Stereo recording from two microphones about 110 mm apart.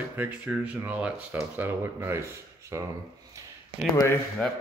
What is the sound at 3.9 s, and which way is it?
Speech, 25° left (ahead or behind).